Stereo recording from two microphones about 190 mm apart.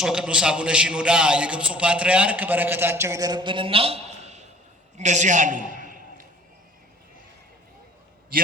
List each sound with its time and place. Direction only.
0.0 s a man's voice: 5° right (ahead or behind); by 6.0 s 45° right (ahead or behind)